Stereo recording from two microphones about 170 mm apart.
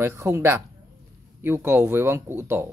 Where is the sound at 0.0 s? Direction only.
15° right (ahead or behind).